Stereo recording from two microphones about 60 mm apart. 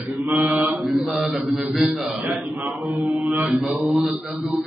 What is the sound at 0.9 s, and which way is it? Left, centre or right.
Speech, centre.